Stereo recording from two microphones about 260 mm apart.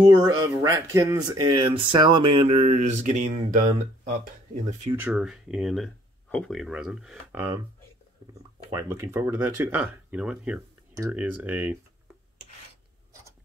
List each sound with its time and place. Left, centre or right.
0.1 s speech: centre
4.9 s speech: centre
8.6 s speech: centre